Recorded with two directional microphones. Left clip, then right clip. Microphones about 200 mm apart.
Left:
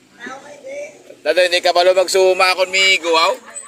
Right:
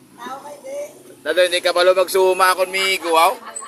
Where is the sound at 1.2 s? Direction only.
15° right (ahead or behind).